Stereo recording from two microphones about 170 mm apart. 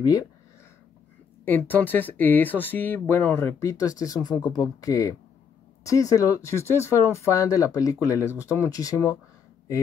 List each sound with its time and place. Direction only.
1.4 s speech: 10° left (ahead or behind)